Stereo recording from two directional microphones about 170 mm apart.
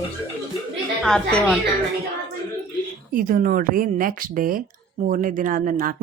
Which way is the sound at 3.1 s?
55° right (ahead or behind).